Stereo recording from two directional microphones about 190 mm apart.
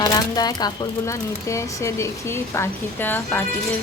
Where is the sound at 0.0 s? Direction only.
20° left (ahead or behind).